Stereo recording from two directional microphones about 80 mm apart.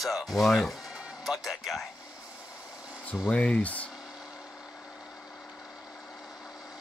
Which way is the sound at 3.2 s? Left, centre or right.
Centre.